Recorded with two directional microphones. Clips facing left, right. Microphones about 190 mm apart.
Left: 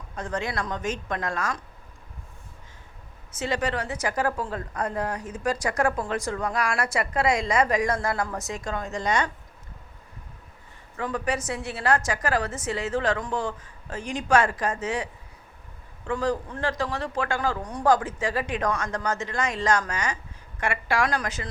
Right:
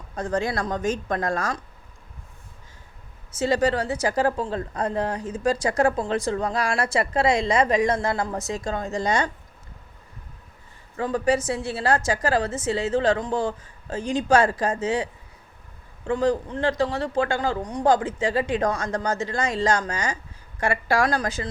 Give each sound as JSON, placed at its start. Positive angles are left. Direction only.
{"t": 0.2, "sound": "a woman's voice", "side_deg": -35}
{"t": 3.3, "sound": "a woman's voice", "side_deg": -35}
{"t": 10.9, "sound": "a woman's voice", "side_deg": -30}